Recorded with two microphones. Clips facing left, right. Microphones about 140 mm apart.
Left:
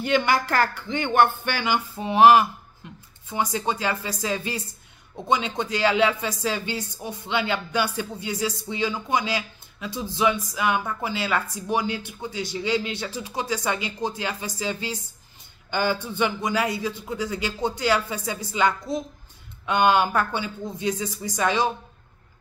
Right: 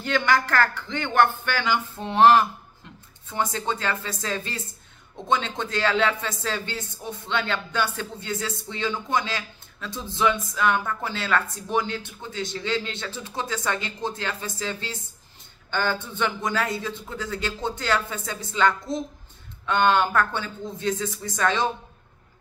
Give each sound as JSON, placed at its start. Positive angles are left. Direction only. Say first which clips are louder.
{"t": 0.0, "sound": "a woman's voice", "louder": "left 1 dB", "side_deg": 15}
{"t": 16.8, "sound": "a woman's voice", "louder": "left 4 dB", "side_deg": 10}
{"t": 19.6, "sound": "a woman's voice", "louder": "left 1 dB", "side_deg": 10}